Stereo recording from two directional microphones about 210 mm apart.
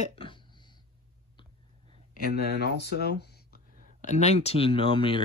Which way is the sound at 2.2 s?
50° left (ahead or behind).